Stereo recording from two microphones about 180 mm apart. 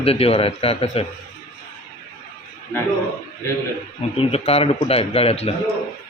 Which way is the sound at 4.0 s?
35° left (ahead or behind).